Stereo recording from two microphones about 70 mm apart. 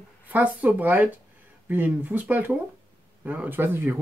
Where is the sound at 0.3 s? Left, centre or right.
Right.